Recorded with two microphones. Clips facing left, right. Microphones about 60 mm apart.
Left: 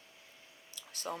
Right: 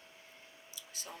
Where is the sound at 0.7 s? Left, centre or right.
Left.